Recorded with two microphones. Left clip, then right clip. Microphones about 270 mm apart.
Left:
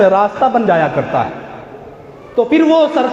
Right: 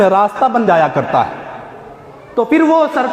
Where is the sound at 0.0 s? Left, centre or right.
Right.